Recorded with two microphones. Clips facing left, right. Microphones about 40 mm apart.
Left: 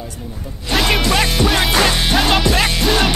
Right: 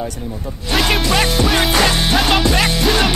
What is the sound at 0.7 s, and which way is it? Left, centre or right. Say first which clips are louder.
Music: even; centre.